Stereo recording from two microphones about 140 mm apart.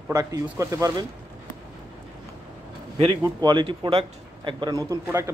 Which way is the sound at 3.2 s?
35° right (ahead or behind).